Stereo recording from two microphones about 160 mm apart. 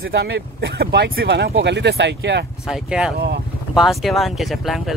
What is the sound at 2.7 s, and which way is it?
Speech, 5° right (ahead or behind).